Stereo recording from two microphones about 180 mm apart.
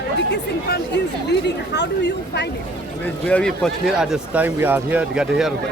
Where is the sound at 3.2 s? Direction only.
5° left (ahead or behind).